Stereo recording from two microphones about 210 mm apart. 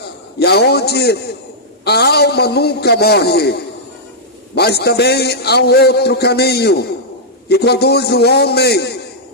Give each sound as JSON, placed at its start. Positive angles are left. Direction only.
{"t": 0.3, "sound": "a man's voice", "side_deg": 50}